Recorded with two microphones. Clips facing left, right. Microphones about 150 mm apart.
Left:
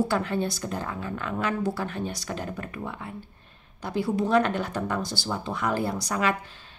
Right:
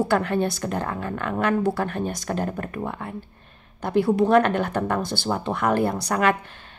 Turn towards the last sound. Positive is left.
turn(degrees=-60)  # may be behind; listen again after turning